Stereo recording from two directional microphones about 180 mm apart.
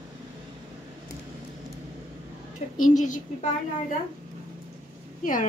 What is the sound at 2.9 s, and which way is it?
A woman's voice, 45° left (ahead or behind).